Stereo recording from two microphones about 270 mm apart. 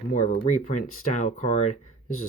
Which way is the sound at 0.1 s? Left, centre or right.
Left.